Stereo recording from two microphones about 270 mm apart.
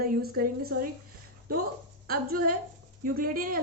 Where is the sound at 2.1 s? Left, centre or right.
Right.